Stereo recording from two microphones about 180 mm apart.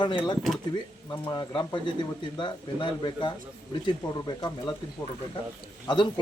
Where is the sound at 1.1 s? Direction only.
25° left (ahead or behind).